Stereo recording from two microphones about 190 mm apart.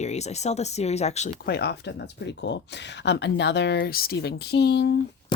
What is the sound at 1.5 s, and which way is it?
Speech, 60° left (ahead or behind).